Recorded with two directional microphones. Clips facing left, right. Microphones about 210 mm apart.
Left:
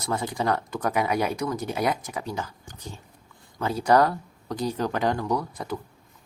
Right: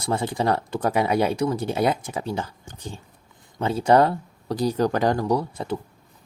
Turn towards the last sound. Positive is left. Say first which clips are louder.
# right 4 dB
turn(degrees=-25)  # may be behind; listen again after turning